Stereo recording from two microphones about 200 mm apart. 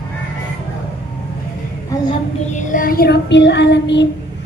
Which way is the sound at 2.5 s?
40° left (ahead or behind).